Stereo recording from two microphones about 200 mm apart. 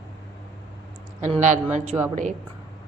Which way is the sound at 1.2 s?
35° right (ahead or behind).